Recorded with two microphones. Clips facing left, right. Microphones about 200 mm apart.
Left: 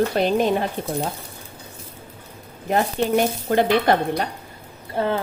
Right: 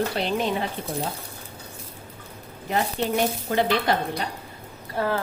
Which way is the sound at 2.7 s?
50° left (ahead or behind).